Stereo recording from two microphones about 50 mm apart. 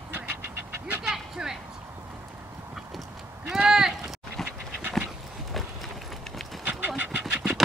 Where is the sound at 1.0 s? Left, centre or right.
Centre.